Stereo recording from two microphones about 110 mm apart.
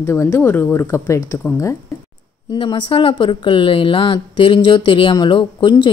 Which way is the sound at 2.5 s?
50° left (ahead or behind).